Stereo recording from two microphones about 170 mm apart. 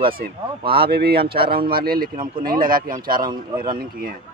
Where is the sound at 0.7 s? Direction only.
70° right (ahead or behind).